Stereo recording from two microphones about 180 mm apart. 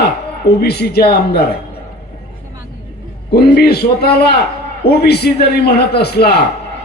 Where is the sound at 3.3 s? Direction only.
60° left (ahead or behind).